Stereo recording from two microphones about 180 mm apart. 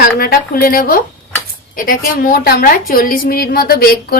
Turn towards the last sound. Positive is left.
turn(degrees=55)  # may be behind; listen again after turning